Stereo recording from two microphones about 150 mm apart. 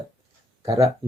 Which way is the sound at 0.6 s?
20° right (ahead or behind).